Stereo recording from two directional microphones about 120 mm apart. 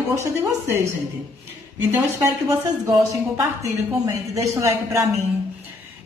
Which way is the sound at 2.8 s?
25° right (ahead or behind).